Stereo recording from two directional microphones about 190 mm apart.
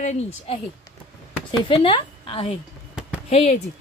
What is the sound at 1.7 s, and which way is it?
A woman's voice, 25° left (ahead or behind).